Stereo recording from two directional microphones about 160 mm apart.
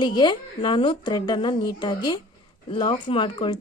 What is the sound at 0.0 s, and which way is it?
Speech, 30° left (ahead or behind).